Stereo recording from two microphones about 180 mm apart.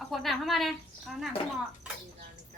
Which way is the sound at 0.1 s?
Centre (ahead or behind).